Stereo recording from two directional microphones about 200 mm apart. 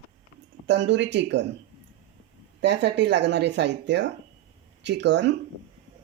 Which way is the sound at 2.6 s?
60° right (ahead or behind).